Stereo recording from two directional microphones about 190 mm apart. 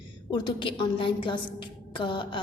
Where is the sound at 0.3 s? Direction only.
25° left (ahead or behind).